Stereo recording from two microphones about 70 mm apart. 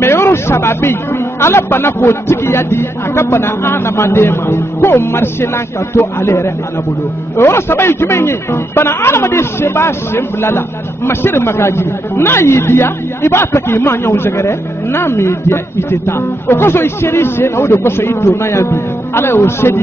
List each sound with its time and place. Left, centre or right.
0.0 s speech: left